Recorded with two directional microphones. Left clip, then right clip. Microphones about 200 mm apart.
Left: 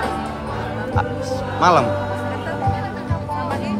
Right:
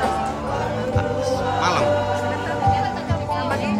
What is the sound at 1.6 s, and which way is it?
Speech, 10° left (ahead or behind).